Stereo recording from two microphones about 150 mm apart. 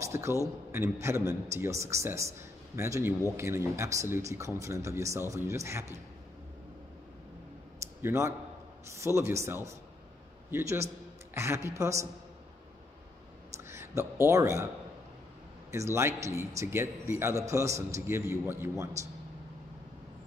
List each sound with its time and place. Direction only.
0.0 s a sound: 20° right (ahead or behind)
0.7 s a man's voice: 20° right (ahead or behind)
8.0 s a man's voice: 15° right (ahead or behind)
13.7 s a man's voice: 15° right (ahead or behind)
15.7 s a man's voice: 20° right (ahead or behind)